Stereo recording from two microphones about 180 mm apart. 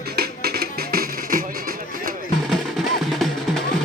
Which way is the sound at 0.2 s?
60° right (ahead or behind).